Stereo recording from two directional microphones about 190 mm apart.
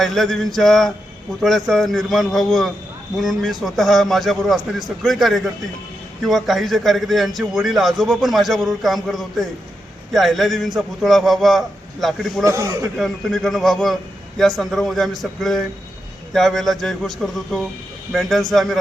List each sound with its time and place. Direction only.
0.0 s a man's voice: centre (ahead or behind)
12.5 s speech: 15° right (ahead or behind)
13.0 s a man's voice: centre (ahead or behind)